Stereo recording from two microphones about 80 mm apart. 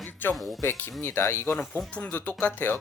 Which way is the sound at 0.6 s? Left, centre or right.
Left.